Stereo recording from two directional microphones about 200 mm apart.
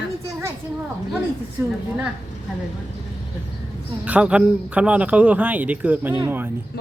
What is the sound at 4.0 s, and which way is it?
A man's voice, 5° right (ahead or behind).